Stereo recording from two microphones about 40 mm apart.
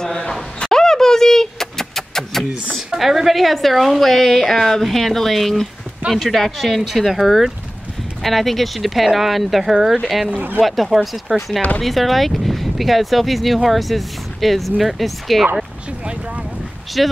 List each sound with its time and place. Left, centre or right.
0.3 s vehicle: centre
3.0 s speech: centre
10.3 s speech: right
10.6 s speech: centre
17.0 s speech: centre